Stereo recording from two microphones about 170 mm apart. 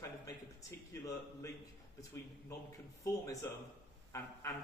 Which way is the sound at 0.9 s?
20° left (ahead or behind).